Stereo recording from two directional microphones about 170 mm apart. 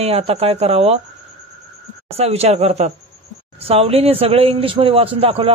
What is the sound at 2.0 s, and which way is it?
A man's voice, 40° right (ahead or behind).